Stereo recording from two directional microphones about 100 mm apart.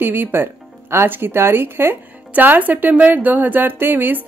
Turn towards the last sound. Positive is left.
turn(degrees=-20)  # may be behind; listen again after turning